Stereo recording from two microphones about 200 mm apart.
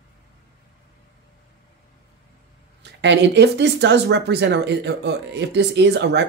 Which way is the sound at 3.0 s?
60° right (ahead or behind).